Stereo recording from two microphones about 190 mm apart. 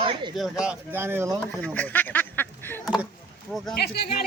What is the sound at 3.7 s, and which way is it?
Speech, 60° left (ahead or behind).